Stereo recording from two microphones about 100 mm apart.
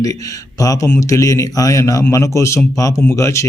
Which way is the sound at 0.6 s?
35° left (ahead or behind).